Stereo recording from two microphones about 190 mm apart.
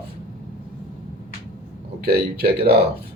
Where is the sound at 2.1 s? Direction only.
55° right (ahead or behind).